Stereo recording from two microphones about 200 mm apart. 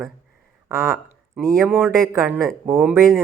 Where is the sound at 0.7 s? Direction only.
15° right (ahead or behind).